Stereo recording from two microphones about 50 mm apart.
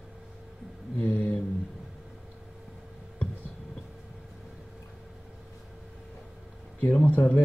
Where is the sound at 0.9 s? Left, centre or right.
Left.